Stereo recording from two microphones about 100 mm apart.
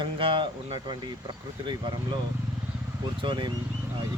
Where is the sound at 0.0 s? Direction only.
55° right (ahead or behind).